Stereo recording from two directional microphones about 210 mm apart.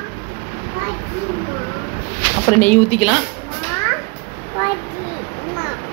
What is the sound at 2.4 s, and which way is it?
Speech, 10° left (ahead or behind).